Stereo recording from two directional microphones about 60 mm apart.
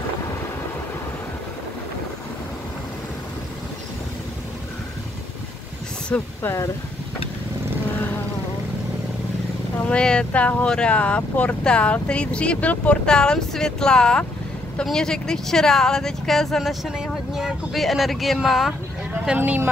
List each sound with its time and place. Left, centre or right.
6.1 s speech: left
6.4 s speech: left
9.8 s speech: centre
16.8 s speech: centre
19.3 s speech: right